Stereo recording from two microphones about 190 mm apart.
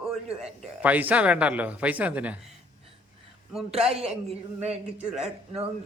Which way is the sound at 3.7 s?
30° right (ahead or behind).